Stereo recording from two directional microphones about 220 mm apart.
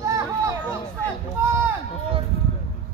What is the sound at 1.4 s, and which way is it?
Run, 10° right (ahead or behind).